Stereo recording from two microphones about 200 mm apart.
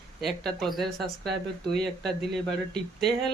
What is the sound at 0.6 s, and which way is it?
Speech, centre (ahead or behind).